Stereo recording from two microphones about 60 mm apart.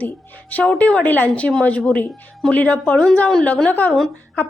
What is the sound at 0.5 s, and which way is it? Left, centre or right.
Speech, left.